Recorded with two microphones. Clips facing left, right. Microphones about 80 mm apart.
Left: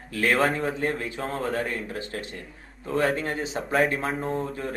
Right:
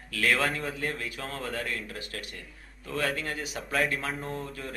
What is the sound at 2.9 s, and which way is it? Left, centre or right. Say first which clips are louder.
A man's voice: left 6 dB; left.